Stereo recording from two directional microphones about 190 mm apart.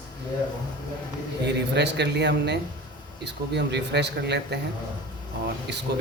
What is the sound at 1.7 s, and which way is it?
Speech, 65° right (ahead or behind).